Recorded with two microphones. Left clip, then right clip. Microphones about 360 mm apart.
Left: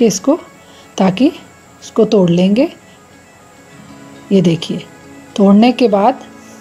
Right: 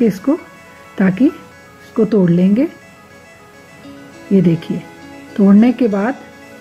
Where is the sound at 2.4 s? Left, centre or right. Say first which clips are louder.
Left 3 dB; left.